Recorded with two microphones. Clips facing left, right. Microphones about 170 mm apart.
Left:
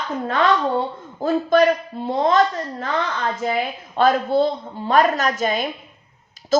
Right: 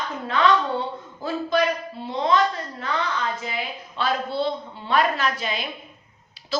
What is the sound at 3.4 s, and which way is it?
A woman's voice, 50° left (ahead or behind).